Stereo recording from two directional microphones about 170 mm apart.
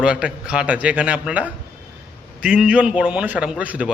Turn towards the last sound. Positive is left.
turn(degrees=-5)  # may be behind; listen again after turning